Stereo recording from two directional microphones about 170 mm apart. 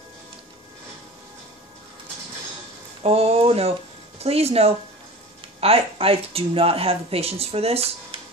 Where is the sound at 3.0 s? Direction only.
35° right (ahead or behind).